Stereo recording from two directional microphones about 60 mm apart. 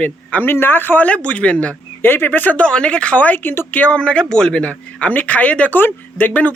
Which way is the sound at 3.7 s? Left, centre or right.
Left.